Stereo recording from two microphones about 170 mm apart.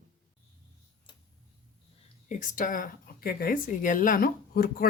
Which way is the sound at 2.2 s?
50° left (ahead or behind).